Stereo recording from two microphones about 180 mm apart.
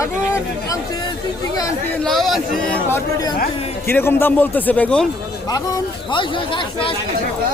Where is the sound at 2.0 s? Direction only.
Centre (ahead or behind).